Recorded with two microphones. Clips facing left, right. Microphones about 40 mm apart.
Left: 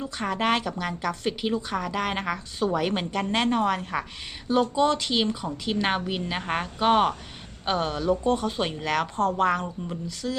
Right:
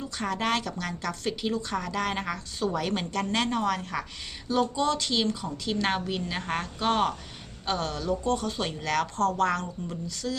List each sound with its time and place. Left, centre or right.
0.0 s a woman's voice: centre